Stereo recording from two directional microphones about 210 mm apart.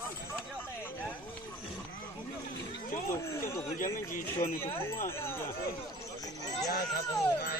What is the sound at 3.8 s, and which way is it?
Speech, 40° left (ahead or behind).